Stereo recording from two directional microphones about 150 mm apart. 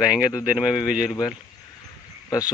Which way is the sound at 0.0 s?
5° right (ahead or behind).